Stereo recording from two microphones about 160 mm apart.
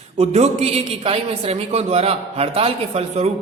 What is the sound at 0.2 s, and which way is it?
A man's voice, 45° right (ahead or behind).